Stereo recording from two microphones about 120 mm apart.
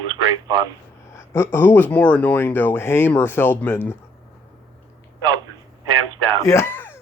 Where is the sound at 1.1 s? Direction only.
20° left (ahead or behind).